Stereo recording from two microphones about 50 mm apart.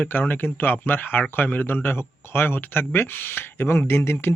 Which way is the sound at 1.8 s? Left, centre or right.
Left.